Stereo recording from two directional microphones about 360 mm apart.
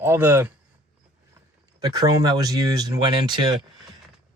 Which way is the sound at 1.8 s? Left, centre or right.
Centre.